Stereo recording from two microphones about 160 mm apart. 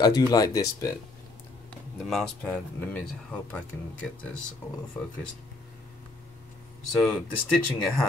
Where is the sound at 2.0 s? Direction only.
5° left (ahead or behind).